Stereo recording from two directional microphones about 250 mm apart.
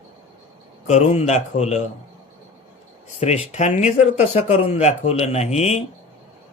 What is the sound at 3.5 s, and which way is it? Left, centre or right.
Speech, left.